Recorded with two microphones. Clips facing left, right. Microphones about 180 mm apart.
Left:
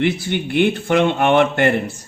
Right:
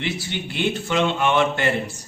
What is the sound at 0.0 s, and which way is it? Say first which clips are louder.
Speech: left 8 dB; 55° left (ahead or behind).